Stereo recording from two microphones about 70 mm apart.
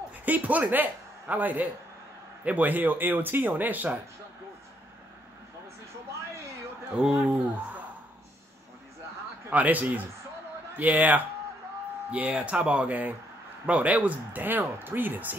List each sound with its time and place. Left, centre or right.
0.2 s speech: right
7.0 s speech: centre
9.5 s speech: right